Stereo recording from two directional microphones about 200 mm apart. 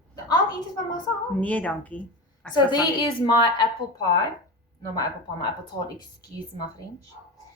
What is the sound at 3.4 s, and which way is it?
A woman's voice, 20° left (ahead or behind).